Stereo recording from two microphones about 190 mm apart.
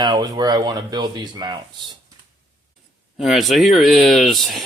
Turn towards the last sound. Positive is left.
turn(degrees=0)  # may be behind; listen again after turning